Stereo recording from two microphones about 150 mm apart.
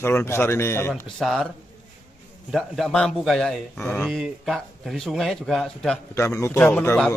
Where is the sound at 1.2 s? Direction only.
Centre (ahead or behind).